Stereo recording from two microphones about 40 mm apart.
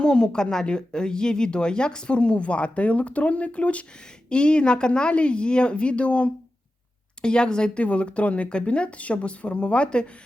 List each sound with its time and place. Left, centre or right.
0.0 s a woman's voice: centre